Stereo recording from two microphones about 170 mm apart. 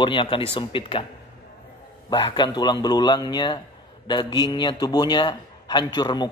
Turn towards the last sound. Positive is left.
turn(degrees=25)  # may be behind; listen again after turning